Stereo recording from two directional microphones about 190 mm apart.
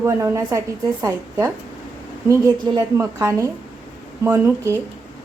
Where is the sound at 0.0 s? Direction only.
15° right (ahead or behind).